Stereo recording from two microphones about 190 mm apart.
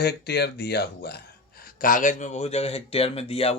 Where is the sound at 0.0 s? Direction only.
60° left (ahead or behind).